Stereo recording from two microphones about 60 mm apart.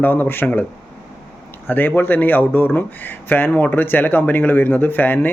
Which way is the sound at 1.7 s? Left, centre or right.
Left.